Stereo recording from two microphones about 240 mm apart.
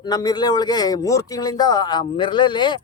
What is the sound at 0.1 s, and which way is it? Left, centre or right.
A man's voice, centre.